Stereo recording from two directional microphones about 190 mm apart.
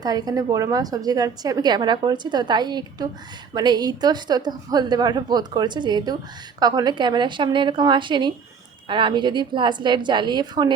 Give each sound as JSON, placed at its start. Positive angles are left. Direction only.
{"t": 0.0, "sound": "a woman's voice", "side_deg": -20}